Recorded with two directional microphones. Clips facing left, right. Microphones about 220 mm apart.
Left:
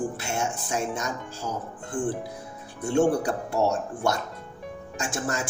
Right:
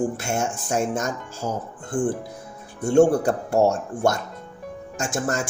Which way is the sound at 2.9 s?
45° right (ahead or behind).